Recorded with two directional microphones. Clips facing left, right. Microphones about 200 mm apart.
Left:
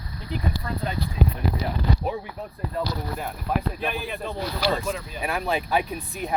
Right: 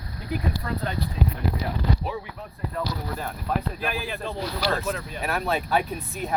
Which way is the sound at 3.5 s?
10° left (ahead or behind).